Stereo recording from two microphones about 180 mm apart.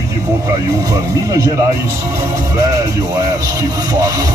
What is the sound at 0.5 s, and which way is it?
Speech, 20° right (ahead or behind).